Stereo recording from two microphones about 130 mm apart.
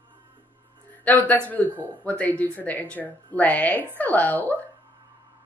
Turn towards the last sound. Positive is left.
turn(degrees=10)  # may be behind; listen again after turning